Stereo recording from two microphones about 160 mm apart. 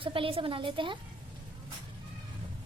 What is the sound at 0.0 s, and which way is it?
Speech, 35° right (ahead or behind).